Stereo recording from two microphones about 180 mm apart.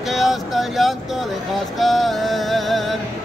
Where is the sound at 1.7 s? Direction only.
Centre (ahead or behind).